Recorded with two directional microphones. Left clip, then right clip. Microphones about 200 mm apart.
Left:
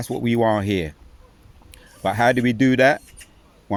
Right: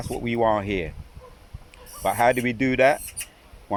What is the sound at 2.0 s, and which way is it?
Speech, 50° left (ahead or behind).